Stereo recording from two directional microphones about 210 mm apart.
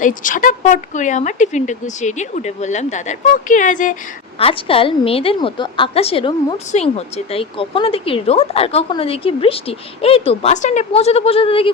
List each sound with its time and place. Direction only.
0.0 s speech: 40° left (ahead or behind)
4.4 s a woman's voice: 25° left (ahead or behind)